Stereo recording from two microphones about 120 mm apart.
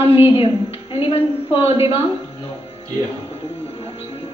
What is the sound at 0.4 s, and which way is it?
A woman's voice, 50° left (ahead or behind).